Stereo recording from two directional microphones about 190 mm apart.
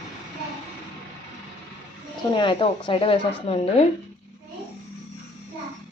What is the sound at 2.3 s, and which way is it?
Speech, 25° left (ahead or behind).